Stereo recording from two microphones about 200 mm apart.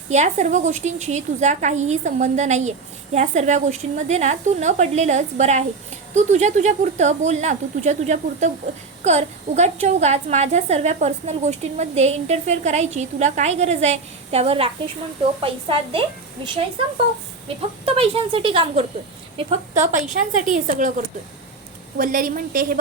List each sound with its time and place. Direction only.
0.1 s a woman's voice: 35° right (ahead or behind)
17.8 s a woman's voice: 30° right (ahead or behind)
21.9 s a woman's voice: 45° right (ahead or behind)